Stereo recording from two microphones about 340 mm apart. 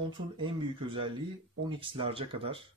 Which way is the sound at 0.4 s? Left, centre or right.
Centre.